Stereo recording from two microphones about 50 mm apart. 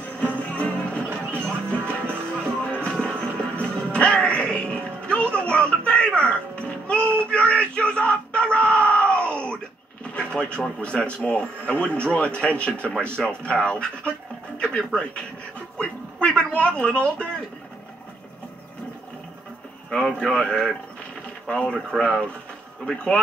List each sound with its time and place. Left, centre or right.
0.2 s music: left
7.2 s yell: left
10.1 s a sound: centre
10.8 s speech: left
19.9 s speech: centre
21.9 s speech: centre